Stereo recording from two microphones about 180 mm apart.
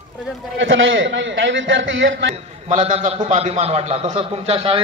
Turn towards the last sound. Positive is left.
turn(degrees=-30)  # may be behind; listen again after turning